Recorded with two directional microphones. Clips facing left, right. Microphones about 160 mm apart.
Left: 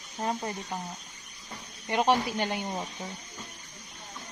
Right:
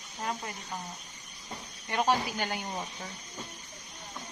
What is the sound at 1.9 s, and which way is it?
Speech, 25° left (ahead or behind).